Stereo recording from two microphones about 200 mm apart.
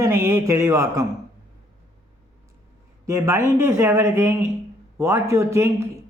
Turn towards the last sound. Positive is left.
turn(degrees=-15)  # may be behind; listen again after turning